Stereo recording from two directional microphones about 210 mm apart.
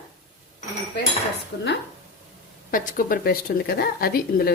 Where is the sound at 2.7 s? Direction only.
40° left (ahead or behind).